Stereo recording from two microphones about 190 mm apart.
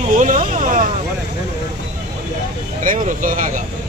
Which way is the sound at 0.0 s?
45° right (ahead or behind).